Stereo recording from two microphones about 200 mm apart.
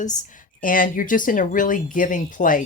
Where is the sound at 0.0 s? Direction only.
40° left (ahead or behind).